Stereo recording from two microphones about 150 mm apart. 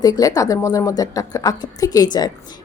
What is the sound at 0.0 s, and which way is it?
Speech, 25° left (ahead or behind).